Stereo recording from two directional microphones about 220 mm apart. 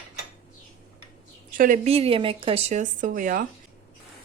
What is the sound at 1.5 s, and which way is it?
Speech, 35° right (ahead or behind).